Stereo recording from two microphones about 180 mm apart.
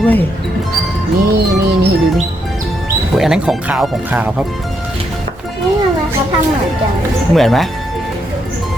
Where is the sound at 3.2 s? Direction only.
5° right (ahead or behind).